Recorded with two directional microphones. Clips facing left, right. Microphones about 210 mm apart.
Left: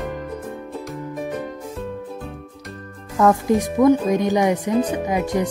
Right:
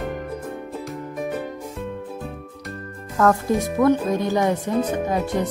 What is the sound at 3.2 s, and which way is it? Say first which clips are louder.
Speech: left 2 dB; 15° left (ahead or behind).